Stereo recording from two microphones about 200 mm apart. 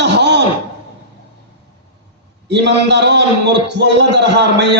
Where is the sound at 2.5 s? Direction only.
60° right (ahead or behind).